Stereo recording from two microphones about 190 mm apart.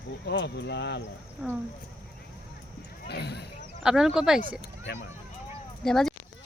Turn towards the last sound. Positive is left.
turn(degrees=0)  # may be behind; listen again after turning